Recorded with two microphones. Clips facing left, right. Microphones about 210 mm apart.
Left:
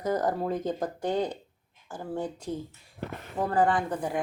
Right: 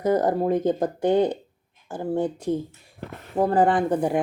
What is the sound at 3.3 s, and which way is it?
Speech, 30° right (ahead or behind).